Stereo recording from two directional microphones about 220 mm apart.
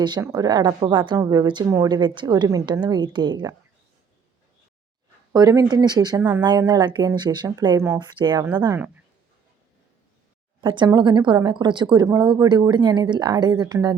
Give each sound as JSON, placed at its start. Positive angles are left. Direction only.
{"t": 0.0, "sound": "speech", "side_deg": -15}
{"t": 5.3, "sound": "speech", "side_deg": -15}
{"t": 10.6, "sound": "speech", "side_deg": -20}